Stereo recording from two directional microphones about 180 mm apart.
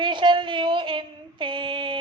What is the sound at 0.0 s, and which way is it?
Female singing, 25° right (ahead or behind).